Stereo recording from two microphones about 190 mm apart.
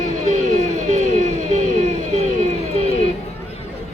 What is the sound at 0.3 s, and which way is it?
Music, 40° right (ahead or behind).